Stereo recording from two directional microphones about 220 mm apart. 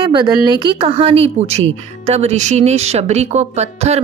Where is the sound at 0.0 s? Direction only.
20° right (ahead or behind).